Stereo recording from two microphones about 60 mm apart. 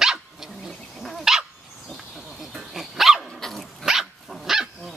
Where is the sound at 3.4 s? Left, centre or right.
Centre.